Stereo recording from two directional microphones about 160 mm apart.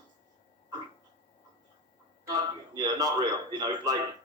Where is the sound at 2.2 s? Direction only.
25° right (ahead or behind).